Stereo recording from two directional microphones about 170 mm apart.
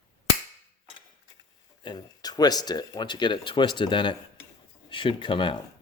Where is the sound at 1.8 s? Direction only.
25° left (ahead or behind).